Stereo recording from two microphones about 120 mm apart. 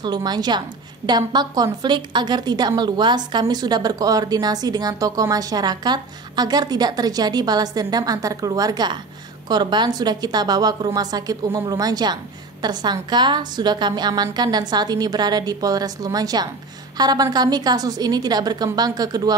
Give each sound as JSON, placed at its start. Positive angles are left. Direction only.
{"t": 0.0, "sound": "a woman's voice", "side_deg": -35}